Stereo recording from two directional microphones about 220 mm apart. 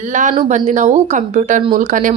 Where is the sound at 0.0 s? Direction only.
35° right (ahead or behind).